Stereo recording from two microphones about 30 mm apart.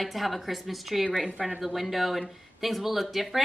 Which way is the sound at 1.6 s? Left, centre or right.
Centre.